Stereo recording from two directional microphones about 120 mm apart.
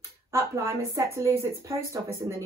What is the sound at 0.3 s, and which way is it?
Speech, 25° right (ahead or behind).